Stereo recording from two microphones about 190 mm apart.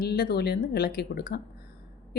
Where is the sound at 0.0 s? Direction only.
55° left (ahead or behind).